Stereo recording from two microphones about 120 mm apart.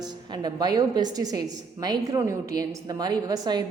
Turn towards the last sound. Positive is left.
turn(degrees=-35)  # may be behind; listen again after turning